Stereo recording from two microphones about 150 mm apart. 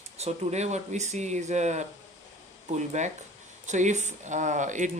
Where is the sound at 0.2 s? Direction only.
50° right (ahead or behind).